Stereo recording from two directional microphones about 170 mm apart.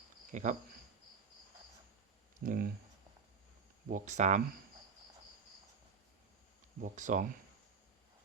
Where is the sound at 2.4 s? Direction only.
60° right (ahead or behind).